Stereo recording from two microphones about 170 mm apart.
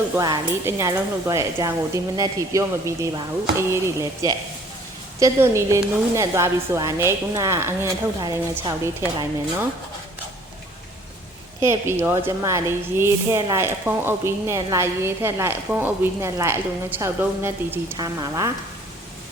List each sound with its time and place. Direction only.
0.2 s a woman's voice: 20° right (ahead or behind)
11.6 s a woman's voice: 15° right (ahead or behind)